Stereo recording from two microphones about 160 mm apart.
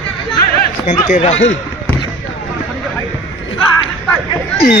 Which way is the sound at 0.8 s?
45° left (ahead or behind).